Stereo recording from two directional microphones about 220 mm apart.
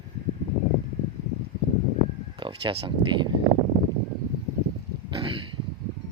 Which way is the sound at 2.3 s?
25° right (ahead or behind).